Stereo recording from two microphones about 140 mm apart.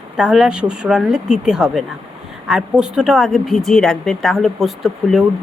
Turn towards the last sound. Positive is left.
turn(degrees=0)  # may be behind; listen again after turning